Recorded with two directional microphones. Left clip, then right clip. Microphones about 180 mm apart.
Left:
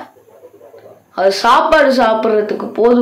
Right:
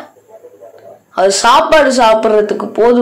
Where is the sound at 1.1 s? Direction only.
20° right (ahead or behind).